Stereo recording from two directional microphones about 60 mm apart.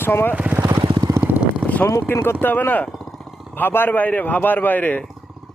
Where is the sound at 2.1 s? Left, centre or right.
Left.